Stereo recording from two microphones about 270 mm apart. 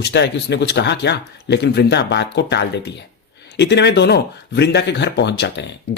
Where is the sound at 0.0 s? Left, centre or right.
Left.